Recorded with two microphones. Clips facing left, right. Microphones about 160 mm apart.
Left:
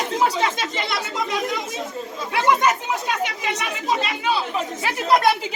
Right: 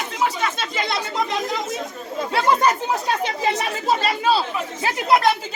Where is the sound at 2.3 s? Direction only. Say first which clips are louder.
Even; 30° right (ahead or behind).